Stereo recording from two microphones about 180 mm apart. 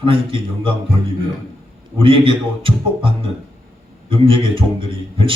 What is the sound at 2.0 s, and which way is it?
Speech, 30° right (ahead or behind).